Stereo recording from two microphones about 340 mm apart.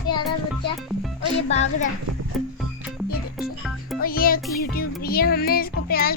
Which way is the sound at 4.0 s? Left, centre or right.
Left.